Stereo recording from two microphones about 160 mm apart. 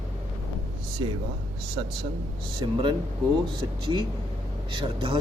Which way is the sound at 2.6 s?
30° right (ahead or behind).